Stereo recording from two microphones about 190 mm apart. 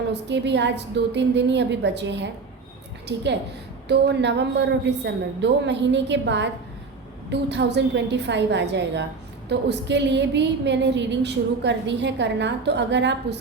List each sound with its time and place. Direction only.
0.1 s a woman's voice: 65° right (ahead or behind)
3.8 s a woman's voice: 60° right (ahead or behind)